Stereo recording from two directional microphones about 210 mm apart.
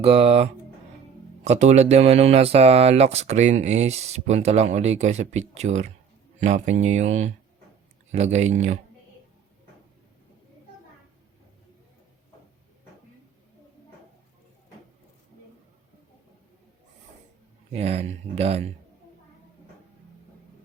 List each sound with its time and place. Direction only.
0.0 s speech: 30° right (ahead or behind)
17.7 s speech: 30° right (ahead or behind)